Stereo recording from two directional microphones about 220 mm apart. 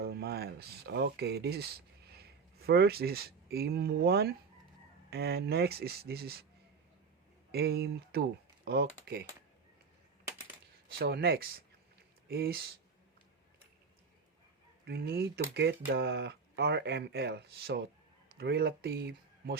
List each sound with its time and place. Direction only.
0.0 s speech: 45° right (ahead or behind)
7.5 s speech: 45° right (ahead or behind)
10.9 s speech: 45° right (ahead or behind)
14.8 s speech: 45° right (ahead or behind)